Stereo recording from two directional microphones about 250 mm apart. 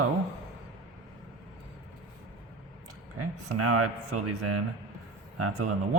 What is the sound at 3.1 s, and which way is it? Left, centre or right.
Speech, right.